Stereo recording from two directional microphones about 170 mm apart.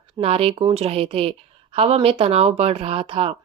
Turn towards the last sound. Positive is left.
turn(degrees=-35)  # may be behind; listen again after turning